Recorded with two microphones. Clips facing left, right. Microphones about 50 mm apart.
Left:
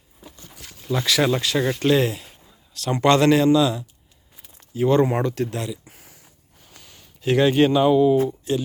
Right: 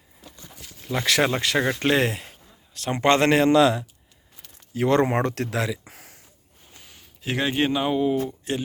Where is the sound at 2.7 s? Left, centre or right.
Right.